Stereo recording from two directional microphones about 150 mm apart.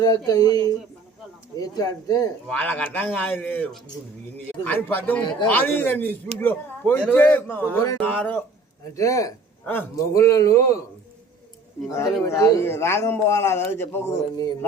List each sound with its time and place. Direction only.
0.0 s a man's voice: 25° left (ahead or behind)
2.5 s speech: 10° left (ahead or behind)
8.8 s a man's voice: 20° left (ahead or behind)
11.9 s a man's voice: 20° left (ahead or behind)